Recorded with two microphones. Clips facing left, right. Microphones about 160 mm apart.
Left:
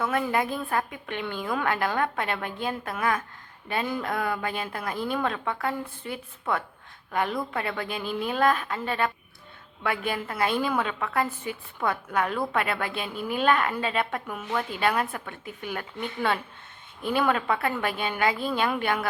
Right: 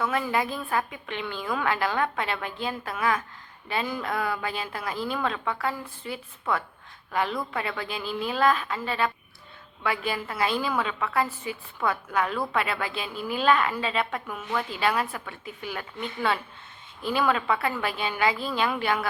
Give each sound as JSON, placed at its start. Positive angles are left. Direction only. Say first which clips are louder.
{"t": 0.0, "sound": "a woman's voice", "louder": "left 1 dB", "side_deg": 50}